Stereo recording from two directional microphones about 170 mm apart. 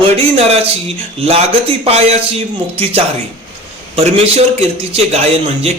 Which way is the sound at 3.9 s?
35° right (ahead or behind).